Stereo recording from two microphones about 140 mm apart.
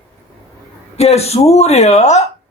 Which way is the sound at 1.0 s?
50° left (ahead or behind).